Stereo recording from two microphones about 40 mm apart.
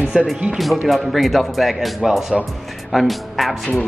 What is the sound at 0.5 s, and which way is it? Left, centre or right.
Speech, centre.